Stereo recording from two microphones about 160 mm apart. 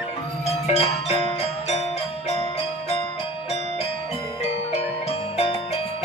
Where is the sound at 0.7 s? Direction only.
40° left (ahead or behind).